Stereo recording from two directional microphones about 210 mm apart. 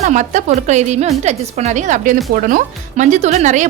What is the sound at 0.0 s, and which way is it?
Speech, 35° right (ahead or behind).